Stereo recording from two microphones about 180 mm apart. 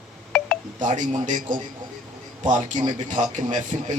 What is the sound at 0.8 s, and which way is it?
A man's voice, 45° right (ahead or behind).